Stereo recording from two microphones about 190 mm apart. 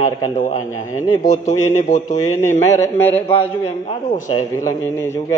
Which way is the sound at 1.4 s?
35° left (ahead or behind).